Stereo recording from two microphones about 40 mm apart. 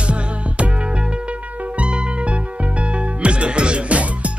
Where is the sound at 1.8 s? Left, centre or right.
Right.